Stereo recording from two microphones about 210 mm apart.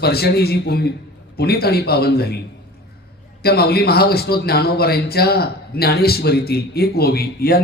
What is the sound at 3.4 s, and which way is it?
A man's voice, 50° left (ahead or behind).